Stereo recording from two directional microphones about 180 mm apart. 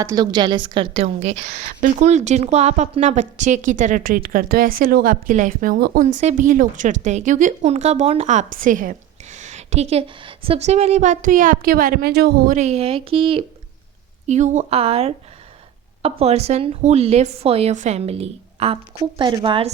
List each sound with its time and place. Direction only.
0.0 s a woman's voice: 20° right (ahead or behind)
14.3 s a woman's voice: 40° right (ahead or behind)